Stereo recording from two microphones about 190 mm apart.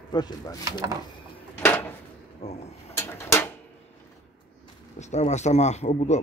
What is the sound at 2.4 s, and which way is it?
Speech, 35° left (ahead or behind).